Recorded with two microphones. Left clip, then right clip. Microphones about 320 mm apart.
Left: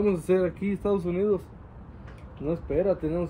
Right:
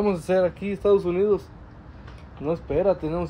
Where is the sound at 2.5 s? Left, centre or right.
Centre.